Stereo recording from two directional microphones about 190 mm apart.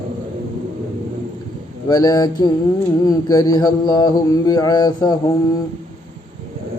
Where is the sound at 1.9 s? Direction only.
20° left (ahead or behind).